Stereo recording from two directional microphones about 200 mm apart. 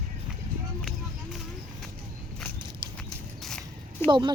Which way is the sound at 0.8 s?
Centre (ahead or behind).